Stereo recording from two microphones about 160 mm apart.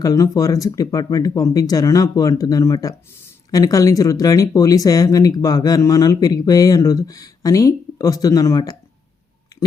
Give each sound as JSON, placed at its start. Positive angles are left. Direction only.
{"t": 0.0, "sound": "speech", "side_deg": 20}